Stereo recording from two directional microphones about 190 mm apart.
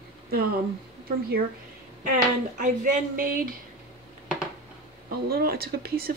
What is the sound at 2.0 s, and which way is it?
Speech, 45° right (ahead or behind).